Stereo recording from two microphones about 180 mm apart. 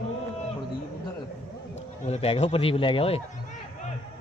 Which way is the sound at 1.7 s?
35° left (ahead or behind).